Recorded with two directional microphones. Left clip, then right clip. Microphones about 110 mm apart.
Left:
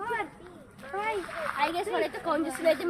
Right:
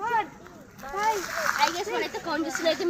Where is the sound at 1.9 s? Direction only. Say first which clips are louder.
Even; 15° left (ahead or behind).